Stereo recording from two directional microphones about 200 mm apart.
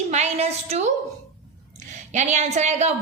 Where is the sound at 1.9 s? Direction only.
35° right (ahead or behind).